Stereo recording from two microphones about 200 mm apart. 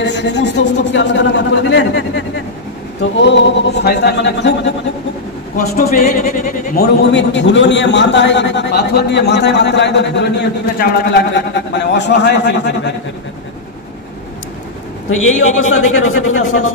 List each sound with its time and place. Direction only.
0.0 s a man's voice: 60° left (ahead or behind)
5.9 s a sound: 35° left (ahead or behind)
6.8 s a man's voice: 60° left (ahead or behind)
15.0 s a man's voice: 90° left